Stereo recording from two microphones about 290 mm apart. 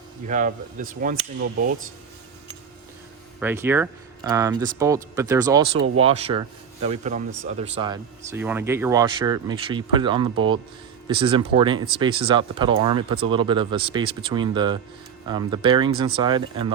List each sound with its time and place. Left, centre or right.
0.3 s speech: right
3.4 s speech: centre